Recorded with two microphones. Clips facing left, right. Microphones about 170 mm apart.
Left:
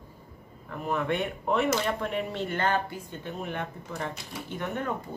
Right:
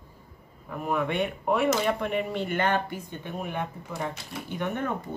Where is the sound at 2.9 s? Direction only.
15° right (ahead or behind).